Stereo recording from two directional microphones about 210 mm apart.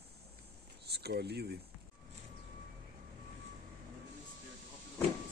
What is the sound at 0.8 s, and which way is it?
Speech, 50° right (ahead or behind).